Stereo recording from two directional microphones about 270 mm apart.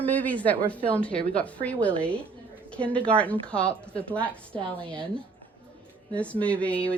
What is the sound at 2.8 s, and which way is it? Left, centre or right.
Speech, centre.